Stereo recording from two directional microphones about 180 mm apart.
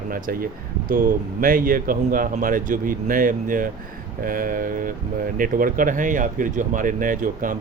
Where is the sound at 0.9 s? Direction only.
50° right (ahead or behind).